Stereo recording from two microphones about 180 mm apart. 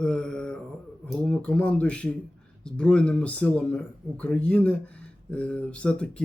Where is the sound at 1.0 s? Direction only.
5° left (ahead or behind).